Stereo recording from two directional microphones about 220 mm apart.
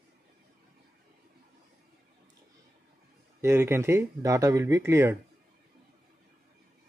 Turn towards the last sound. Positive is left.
turn(degrees=-10)  # may be behind; listen again after turning